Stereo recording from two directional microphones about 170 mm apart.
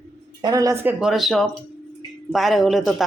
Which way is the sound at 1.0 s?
Centre (ahead or behind).